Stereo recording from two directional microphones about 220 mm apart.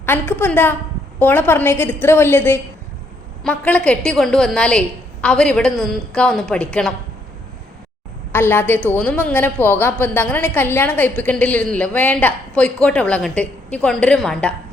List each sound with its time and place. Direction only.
0.0 s a woman's voice: 10° left (ahead or behind)
8.3 s a woman's voice: 10° left (ahead or behind)